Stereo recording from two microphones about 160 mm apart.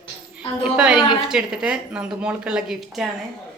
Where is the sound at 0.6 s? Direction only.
5° right (ahead or behind).